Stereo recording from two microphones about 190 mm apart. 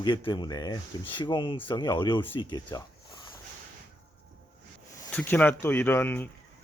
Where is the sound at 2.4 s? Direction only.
20° left (ahead or behind).